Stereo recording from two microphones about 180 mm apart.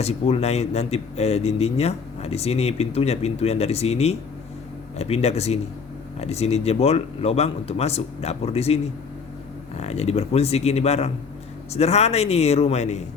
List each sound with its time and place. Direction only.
0.0 s speech: 35° left (ahead or behind)